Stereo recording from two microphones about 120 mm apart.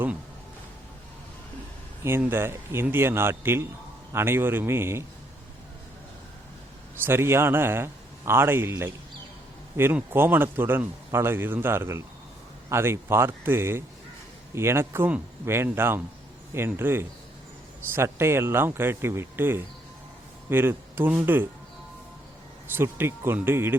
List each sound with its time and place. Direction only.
2.0 s a man's voice: 20° right (ahead or behind)
7.0 s a man's voice: 20° right (ahead or behind)
22.7 s a man's voice: 20° right (ahead or behind)